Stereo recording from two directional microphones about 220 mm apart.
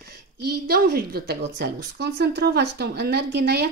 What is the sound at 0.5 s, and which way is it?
A woman's voice, 45° right (ahead or behind).